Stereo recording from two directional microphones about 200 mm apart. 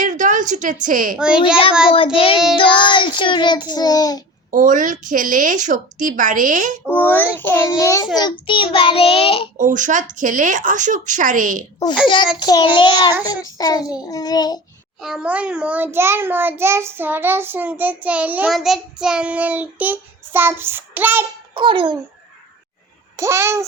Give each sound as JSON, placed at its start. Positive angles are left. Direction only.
{"t": 0.0, "sound": "a sound", "side_deg": -40}
{"t": 1.1, "sound": "a child's voice", "side_deg": -5}
{"t": 2.1, "sound": "child singing", "side_deg": 25}
{"t": 4.5, "sound": "a woman's voice", "side_deg": -40}
{"t": 6.8, "sound": "a child's voice", "side_deg": 10}
{"t": 8.1, "sound": "child singing", "side_deg": 25}
{"t": 9.6, "sound": "a woman's voice", "side_deg": -40}
{"t": 12.4, "sound": "child singing", "side_deg": 20}
{"t": 15.0, "sound": "a child's voice", "side_deg": -5}
{"t": 21.5, "sound": "a child's voice", "side_deg": -25}
{"t": 23.1, "sound": "a child's voice", "side_deg": -15}